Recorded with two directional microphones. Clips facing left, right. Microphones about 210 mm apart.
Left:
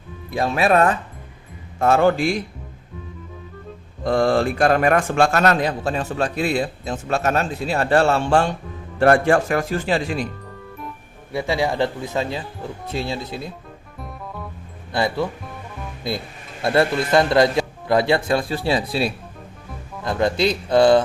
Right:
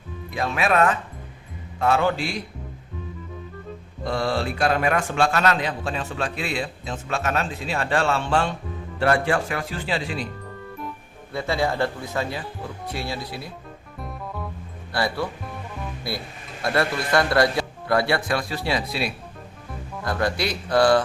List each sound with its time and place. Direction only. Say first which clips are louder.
0.3 s a man's voice: left 4 dB; 35° left (ahead or behind)
4.0 s a man's voice: left 7 dB; 50° left (ahead or behind)
11.3 s speech: left 2 dB; 15° left (ahead or behind)
14.0 s music: even; centre (ahead or behind)
14.9 s speech: left 4 dB; 20° left (ahead or behind)
16.6 s speech: left 5 dB; 25° left (ahead or behind)